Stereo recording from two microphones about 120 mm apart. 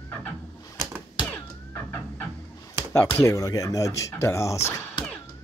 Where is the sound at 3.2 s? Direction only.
25° left (ahead or behind).